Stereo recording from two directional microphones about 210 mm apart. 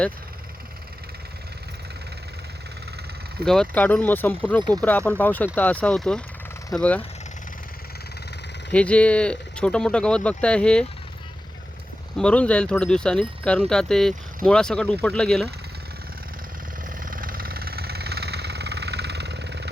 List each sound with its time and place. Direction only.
3.4 s speech: 5° left (ahead or behind)
8.7 s speech: 5° left (ahead or behind)
12.1 s speech: 5° left (ahead or behind)
17.0 s vehicle: 40° right (ahead or behind)